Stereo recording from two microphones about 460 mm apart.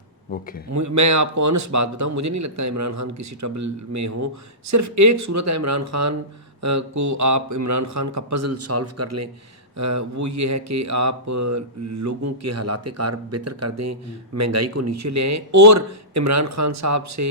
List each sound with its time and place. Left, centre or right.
0.7 s speech: right